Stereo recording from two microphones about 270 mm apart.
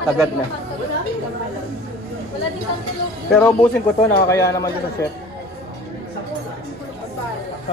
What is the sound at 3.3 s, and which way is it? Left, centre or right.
Speech, centre.